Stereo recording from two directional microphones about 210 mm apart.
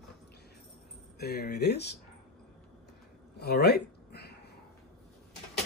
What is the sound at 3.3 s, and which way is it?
Cat, 50° left (ahead or behind).